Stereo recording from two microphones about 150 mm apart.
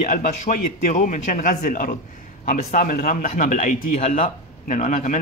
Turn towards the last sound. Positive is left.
turn(degrees=55)  # may be behind; listen again after turning